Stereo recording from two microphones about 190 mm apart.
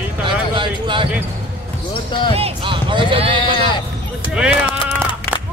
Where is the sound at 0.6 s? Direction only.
25° right (ahead or behind).